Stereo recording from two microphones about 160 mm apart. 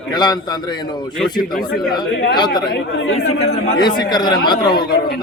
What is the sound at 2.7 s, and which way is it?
Speech, 90° left.